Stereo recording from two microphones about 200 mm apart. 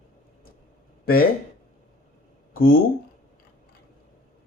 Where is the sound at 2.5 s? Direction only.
45° left (ahead or behind).